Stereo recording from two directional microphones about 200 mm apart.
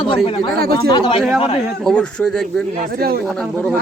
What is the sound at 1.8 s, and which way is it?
A man's voice, 5° left (ahead or behind).